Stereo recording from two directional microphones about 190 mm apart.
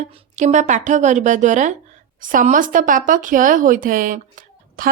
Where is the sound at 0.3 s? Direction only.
40° right (ahead or behind).